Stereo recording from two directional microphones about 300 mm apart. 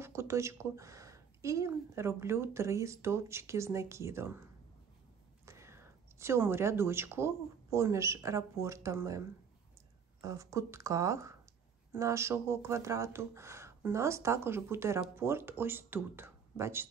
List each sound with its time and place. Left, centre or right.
0.0 s speech: centre
10.2 s speech: centre